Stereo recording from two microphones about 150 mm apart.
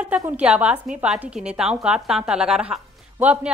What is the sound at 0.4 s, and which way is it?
A woman's voice, 10° right (ahead or behind).